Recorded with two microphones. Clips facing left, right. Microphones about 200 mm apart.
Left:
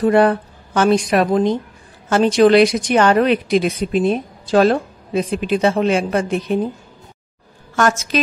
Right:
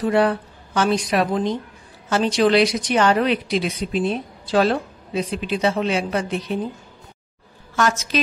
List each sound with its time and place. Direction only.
0.0 s a woman's voice: 50° left (ahead or behind)
7.7 s a woman's voice: 50° left (ahead or behind)